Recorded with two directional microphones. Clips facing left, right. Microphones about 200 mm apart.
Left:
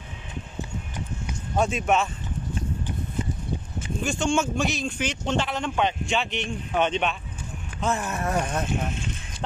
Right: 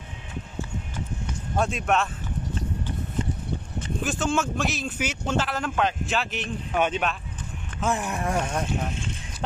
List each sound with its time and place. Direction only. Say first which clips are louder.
0.6 s clip-clop: right 1 dB; 15° left (ahead or behind)
1.6 s speech: left 1 dB; centre (ahead or behind)
4.0 s speech: left 2 dB; 5° right (ahead or behind)
7.8 s speech: even; 15° right (ahead or behind)